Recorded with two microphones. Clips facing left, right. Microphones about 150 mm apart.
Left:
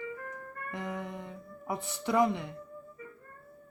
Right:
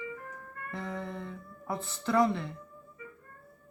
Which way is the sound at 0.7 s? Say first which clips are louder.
Even; 15° left (ahead or behind).